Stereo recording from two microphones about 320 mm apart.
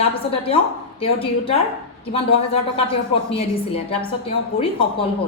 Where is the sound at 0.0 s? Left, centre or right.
Centre.